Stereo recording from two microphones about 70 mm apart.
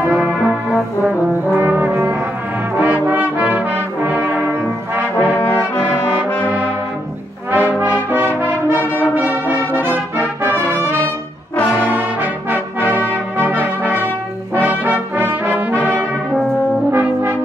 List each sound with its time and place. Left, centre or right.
0.1 s brass instrument: centre
1.5 s brass instrument: right
2.8 s music: right
6.4 s trombone: right
7.5 s music: right
8.7 s music: left
9.1 s brass instrument: right
10.1 s music: right
11.7 s brass instrument: right
14.5 s trombone: right
16.9 s brass instrument: right